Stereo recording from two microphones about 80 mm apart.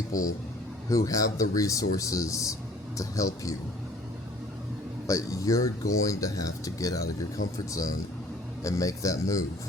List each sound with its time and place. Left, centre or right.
0.1 s speech: left
5.0 s speech: left
8.6 s speech: left